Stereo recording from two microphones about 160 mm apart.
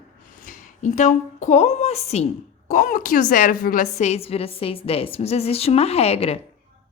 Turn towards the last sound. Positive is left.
turn(degrees=40)  # may be behind; listen again after turning